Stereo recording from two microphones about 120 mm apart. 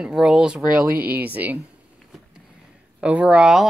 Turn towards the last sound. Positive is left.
turn(degrees=-5)  # may be behind; listen again after turning